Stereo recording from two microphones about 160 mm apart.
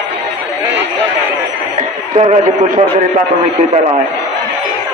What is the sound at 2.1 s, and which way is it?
Speech, 40° right (ahead or behind).